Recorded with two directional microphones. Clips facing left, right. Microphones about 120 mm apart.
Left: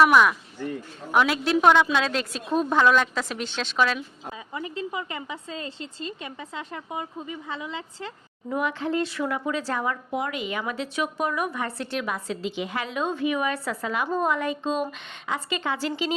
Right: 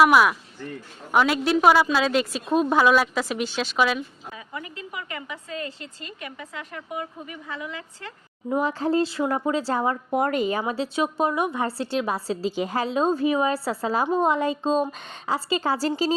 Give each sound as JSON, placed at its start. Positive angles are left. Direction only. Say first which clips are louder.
{"t": 0.0, "sound": "a woman's voice", "louder": "right 1 dB", "side_deg": -5}
{"t": 4.3, "sound": "a woman's voice", "louder": "left 2 dB", "side_deg": 25}
{"t": 8.4, "sound": "a woman's voice", "louder": "right 3 dB", "side_deg": -30}
{"t": 10.2, "sound": "a woman's voice", "louder": "right 6 dB", "side_deg": -45}